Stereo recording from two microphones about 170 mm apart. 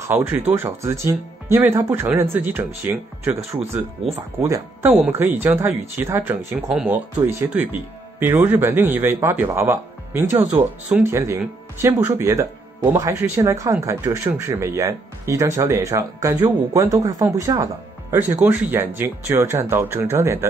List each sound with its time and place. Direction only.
0.0 s speech: 15° right (ahead or behind)